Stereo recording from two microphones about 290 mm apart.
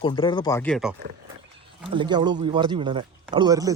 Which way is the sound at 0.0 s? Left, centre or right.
Centre.